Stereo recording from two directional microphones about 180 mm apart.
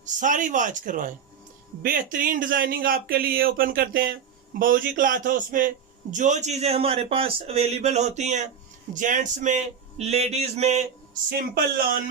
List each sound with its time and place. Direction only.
0.0 s a man's voice: 45° right (ahead or behind)